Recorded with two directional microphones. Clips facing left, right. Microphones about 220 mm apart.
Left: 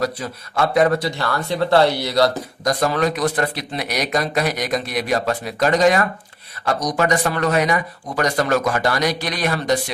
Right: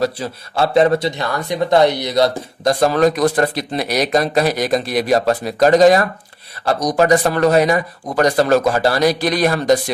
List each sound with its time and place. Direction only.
0.0 s speech: 30° right (ahead or behind)